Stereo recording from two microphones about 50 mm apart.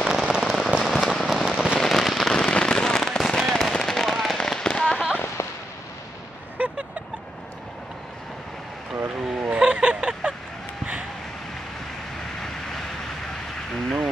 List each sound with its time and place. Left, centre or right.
0.0 s firecracker: centre
1.8 s fireworks: centre
2.3 s fireworks: centre
3.3 s firecracker: centre
4.9 s firecracker: centre
6.6 s a sound: right
9.2 s vehicle: centre
9.5 s a sound: right